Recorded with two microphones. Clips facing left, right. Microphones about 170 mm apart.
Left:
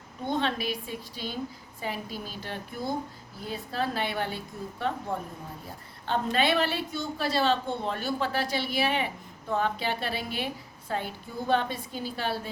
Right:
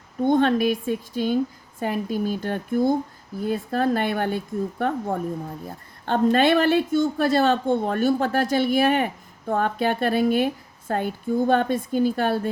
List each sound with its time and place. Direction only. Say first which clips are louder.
0.3 s a woman's voice: right 10 dB; 50° right (ahead or behind)